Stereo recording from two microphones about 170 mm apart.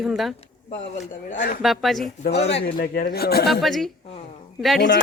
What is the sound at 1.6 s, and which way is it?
Speech, centre (ahead or behind).